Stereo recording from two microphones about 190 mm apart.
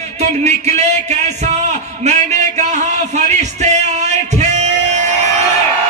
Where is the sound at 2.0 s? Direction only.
35° right (ahead or behind).